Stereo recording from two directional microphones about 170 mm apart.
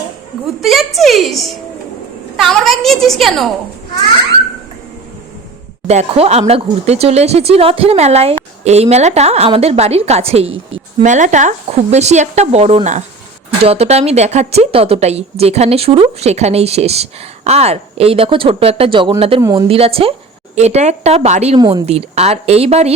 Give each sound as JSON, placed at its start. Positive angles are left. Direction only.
{"t": 0.6, "sound": "a woman's voice", "side_deg": 0}
{"t": 5.9, "sound": "a woman's voice", "side_deg": -40}
{"t": 19.4, "sound": "speech", "side_deg": -20}
{"t": 19.6, "sound": "a woman's voice", "side_deg": -35}
{"t": 21.6, "sound": "speech", "side_deg": -25}
{"t": 21.8, "sound": "a woman's voice", "side_deg": -40}